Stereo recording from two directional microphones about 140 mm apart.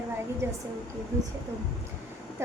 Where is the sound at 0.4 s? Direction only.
20° right (ahead or behind).